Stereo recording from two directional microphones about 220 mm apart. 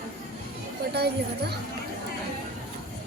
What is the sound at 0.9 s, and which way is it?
Speech, 50° right (ahead or behind).